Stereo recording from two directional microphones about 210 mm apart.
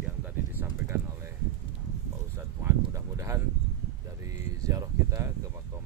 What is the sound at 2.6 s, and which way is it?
Speech, 15° right (ahead or behind).